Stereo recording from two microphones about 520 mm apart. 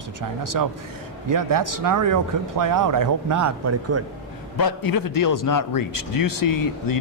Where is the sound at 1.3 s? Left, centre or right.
Right.